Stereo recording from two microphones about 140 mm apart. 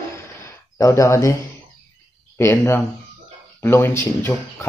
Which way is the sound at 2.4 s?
15° left (ahead or behind).